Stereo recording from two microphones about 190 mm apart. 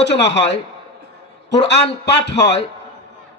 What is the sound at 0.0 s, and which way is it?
Speech, 65° left (ahead or behind).